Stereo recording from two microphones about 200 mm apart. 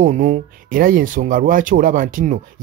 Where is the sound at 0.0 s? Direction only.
40° right (ahead or behind).